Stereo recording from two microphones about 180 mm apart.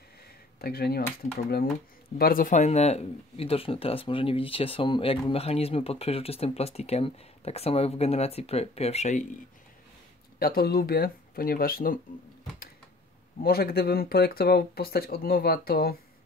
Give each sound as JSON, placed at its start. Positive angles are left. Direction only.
{"t": 0.6, "sound": "speech", "side_deg": 60}
{"t": 2.1, "sound": "speech", "side_deg": 55}
{"t": 10.4, "sound": "speech", "side_deg": 55}
{"t": 13.4, "sound": "speech", "side_deg": 55}